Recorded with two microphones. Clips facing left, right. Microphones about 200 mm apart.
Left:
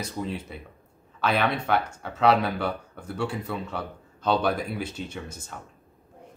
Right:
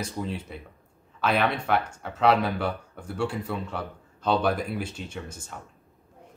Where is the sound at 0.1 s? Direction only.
Centre (ahead or behind).